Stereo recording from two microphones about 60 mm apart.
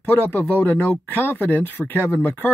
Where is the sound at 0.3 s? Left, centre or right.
Left.